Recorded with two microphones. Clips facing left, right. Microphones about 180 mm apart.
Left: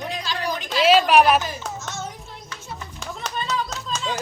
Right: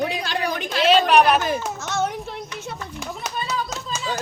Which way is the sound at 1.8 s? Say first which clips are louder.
Right 8 dB; 65° right (ahead or behind).